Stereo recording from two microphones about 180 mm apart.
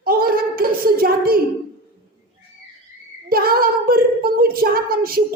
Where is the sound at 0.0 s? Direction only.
55° right (ahead or behind).